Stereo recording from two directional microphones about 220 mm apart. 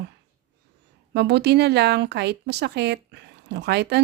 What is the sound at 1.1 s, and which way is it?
A woman's voice, 50° right (ahead or behind).